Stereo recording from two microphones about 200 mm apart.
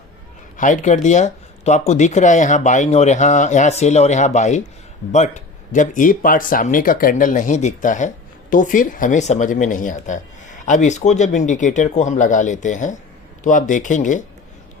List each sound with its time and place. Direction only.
0.5 s speech: 40° left (ahead or behind)